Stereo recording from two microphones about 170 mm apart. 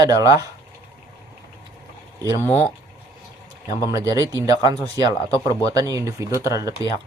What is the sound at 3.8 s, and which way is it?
Speech, 20° right (ahead or behind).